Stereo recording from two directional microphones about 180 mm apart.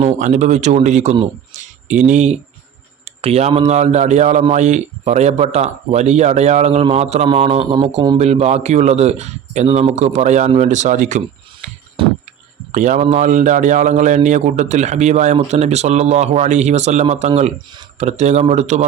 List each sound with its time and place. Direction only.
0.2 s a man's voice: 40° right (ahead or behind); by 8.2 s 25° right (ahead or behind)
8.2 s a man's voice: 35° right (ahead or behind)
12.0 s a sound: 30° right (ahead or behind)
12.7 s a man's voice: 45° right (ahead or behind)